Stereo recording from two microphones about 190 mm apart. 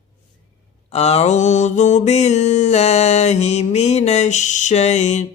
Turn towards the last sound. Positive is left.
turn(degrees=35)  # may be behind; listen again after turning